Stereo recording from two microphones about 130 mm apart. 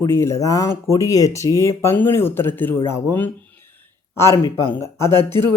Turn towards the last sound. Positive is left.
turn(degrees=20)  # may be behind; listen again after turning